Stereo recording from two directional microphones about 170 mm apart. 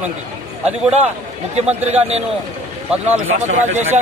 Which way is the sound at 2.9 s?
5° right (ahead or behind).